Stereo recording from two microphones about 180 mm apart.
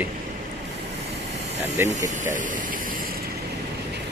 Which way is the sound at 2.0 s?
45° right (ahead or behind).